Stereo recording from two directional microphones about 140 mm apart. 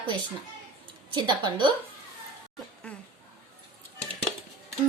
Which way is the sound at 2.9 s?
5° left (ahead or behind).